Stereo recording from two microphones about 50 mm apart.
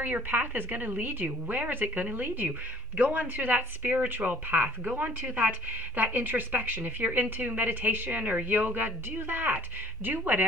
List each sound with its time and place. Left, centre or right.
0.0 s a woman's voice: right